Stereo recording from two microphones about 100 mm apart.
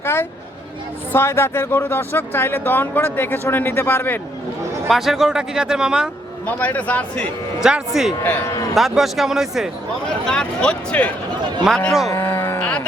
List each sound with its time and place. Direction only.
0.0 s vehicle: 25° left (ahead or behind)
1.1 s speech: 25° left (ahead or behind)
4.9 s speech: centre (ahead or behind)
6.4 s a man's voice: 15° left (ahead or behind)
7.6 s speech: 5° right (ahead or behind)
8.2 s speech: 20° left (ahead or behind)
8.7 s speech: centre (ahead or behind)
10.2 s a man's voice: 10° left (ahead or behind)
12.2 s cattle: 25° left (ahead or behind)